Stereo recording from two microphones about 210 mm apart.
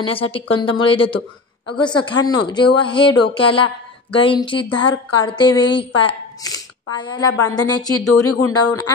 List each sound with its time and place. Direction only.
0.0 s speech: 25° left (ahead or behind)
8.3 s speech: 90° left